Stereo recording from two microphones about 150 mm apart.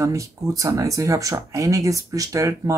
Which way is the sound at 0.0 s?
20° right (ahead or behind).